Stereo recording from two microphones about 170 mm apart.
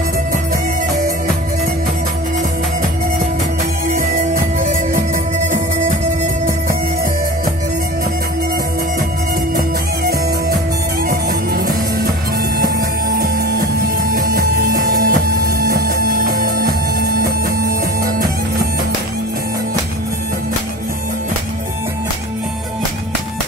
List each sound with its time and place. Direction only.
3.9 s music: 50° right (ahead or behind)
11.1 s music: 55° right (ahead or behind)